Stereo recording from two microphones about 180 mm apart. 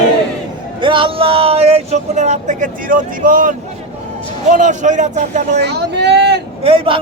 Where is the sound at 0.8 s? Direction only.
30° right (ahead or behind); by 3.5 s 50° right (ahead or behind).